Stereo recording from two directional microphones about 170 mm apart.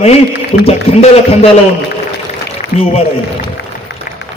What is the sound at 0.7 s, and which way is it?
Speech, 35° left (ahead or behind).